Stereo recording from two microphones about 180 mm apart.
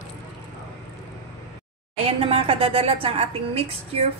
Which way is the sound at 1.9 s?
30° right (ahead or behind).